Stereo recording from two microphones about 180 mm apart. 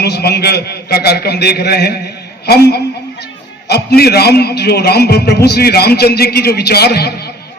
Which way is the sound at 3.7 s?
60° left (ahead or behind).